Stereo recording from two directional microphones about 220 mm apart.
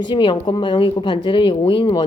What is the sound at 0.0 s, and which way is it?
A woman's voice, 20° left (ahead or behind).